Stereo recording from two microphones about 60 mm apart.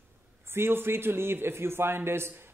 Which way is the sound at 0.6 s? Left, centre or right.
Right.